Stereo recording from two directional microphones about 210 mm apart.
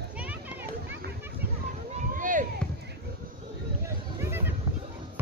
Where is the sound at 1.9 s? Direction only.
40° right (ahead or behind).